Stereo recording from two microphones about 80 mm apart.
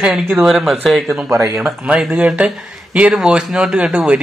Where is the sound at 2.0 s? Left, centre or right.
Centre.